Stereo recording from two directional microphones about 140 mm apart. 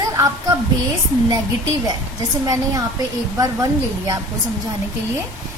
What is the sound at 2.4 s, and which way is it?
A woman's voice, 25° right (ahead or behind).